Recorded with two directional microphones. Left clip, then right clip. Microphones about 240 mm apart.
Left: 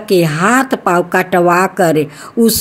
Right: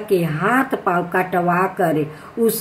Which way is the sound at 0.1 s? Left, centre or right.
Left.